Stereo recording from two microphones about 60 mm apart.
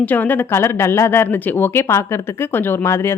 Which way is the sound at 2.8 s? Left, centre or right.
Left.